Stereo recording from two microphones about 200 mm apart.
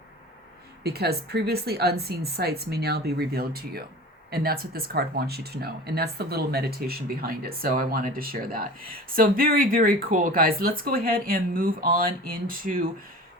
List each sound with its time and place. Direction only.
0.9 s speech: 50° right (ahead or behind)